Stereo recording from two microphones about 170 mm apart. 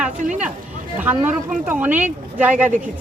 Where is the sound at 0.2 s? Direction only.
45° right (ahead or behind).